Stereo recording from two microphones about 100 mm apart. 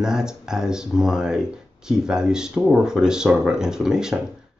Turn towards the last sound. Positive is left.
turn(degrees=-5)  # may be behind; listen again after turning